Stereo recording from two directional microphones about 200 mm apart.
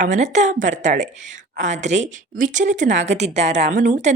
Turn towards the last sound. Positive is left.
turn(degrees=-40)  # may be behind; listen again after turning